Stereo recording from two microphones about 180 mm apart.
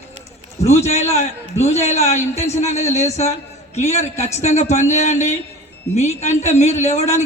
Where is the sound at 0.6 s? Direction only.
40° left (ahead or behind).